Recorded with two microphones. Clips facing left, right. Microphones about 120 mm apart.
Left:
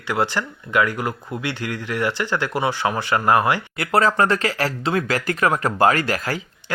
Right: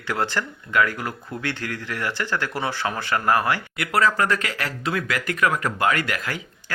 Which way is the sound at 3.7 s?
30° left (ahead or behind).